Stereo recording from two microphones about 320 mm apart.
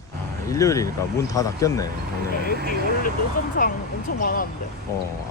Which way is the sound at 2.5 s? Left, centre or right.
Right.